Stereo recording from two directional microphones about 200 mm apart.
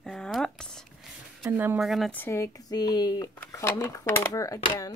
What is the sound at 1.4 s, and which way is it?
Speech, 5° right (ahead or behind).